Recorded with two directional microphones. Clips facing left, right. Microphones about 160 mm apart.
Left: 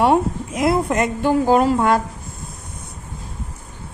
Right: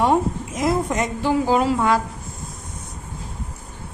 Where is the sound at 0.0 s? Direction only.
65° left (ahead or behind); by 2.0 s 50° left (ahead or behind).